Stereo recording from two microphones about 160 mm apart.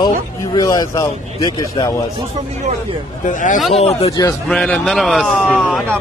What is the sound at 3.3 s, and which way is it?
Speech, 50° left (ahead or behind).